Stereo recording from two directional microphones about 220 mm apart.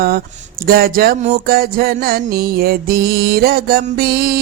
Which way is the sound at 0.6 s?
45° right (ahead or behind).